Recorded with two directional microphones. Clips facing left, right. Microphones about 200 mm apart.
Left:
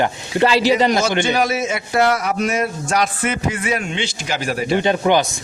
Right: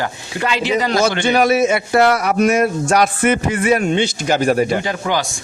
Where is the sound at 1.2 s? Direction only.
60° right (ahead or behind); by 4.7 s 45° right (ahead or behind).